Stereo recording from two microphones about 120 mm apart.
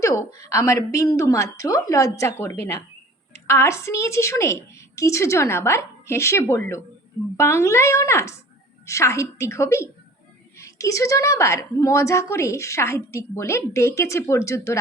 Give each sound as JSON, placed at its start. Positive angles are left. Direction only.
{"t": 0.0, "sound": "a woman's voice", "side_deg": 25}